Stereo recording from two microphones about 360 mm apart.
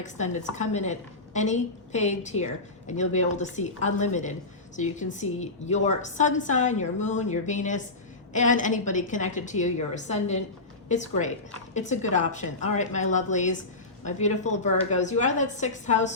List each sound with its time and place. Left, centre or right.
0.0 s a woman's voice: centre